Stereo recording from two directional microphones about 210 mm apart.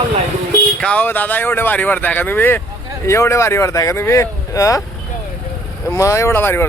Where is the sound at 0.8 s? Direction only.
5° left (ahead or behind).